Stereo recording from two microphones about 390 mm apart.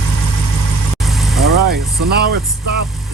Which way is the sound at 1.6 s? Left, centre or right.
Right.